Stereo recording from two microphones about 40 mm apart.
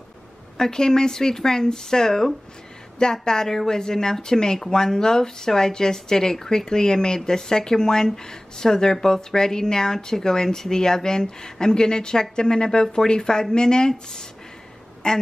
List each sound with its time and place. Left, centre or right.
0.6 s a woman's voice: centre